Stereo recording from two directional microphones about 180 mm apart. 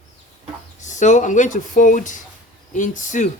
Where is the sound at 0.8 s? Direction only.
40° left (ahead or behind).